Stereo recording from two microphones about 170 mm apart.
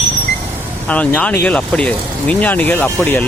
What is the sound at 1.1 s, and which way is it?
Speech, 10° left (ahead or behind).